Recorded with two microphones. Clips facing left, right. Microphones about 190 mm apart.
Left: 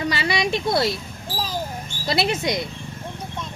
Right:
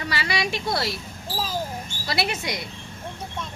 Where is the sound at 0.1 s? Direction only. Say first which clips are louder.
Left 4 dB; 20° left (ahead or behind).